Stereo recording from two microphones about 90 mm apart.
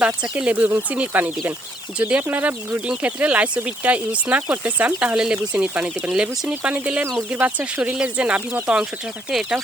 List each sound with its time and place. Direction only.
0.0 s speech: 15° right (ahead or behind)